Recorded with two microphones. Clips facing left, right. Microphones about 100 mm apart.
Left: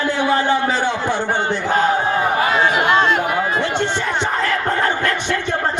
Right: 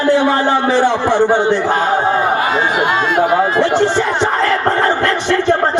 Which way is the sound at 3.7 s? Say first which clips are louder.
Right 7 dB; 40° right (ahead or behind).